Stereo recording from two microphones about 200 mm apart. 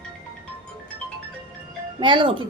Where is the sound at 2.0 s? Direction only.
25° right (ahead or behind).